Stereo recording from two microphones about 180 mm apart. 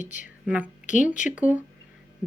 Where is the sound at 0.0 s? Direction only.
45° left (ahead or behind).